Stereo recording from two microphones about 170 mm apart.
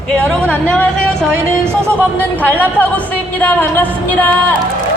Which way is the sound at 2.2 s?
10° left (ahead or behind).